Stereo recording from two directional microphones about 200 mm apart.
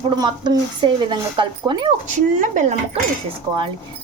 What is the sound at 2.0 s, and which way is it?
Speech, 40° right (ahead or behind).